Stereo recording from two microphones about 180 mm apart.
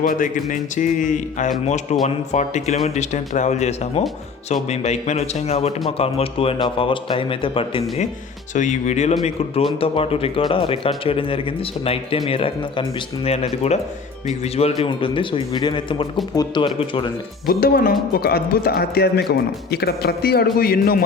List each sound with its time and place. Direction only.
0.0 s speech: 50° left (ahead or behind); by 8.0 s 30° left (ahead or behind)
8.5 s speech: 40° left (ahead or behind); by 17.1 s 25° left (ahead or behind)
17.4 s a man's voice: 55° left (ahead or behind)